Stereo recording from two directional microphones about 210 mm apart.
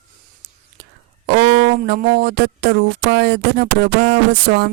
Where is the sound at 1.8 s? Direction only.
45° right (ahead or behind).